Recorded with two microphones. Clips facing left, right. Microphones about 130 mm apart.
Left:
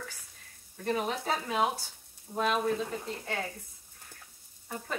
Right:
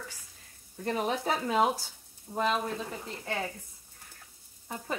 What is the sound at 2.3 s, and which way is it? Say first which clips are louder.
Speech: even; centre (ahead or behind).